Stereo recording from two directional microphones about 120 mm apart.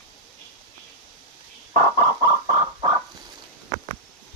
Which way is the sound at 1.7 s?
90° right.